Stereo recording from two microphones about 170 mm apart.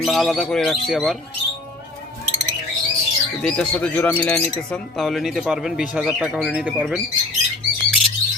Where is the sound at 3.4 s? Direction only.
5° left (ahead or behind).